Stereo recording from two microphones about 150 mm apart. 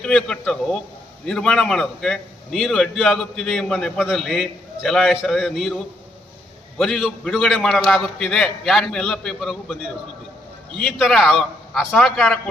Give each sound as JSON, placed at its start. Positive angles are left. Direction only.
{"t": 0.0, "sound": "a man's voice", "side_deg": 5}